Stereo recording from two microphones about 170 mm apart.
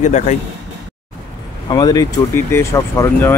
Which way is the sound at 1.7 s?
25° left (ahead or behind).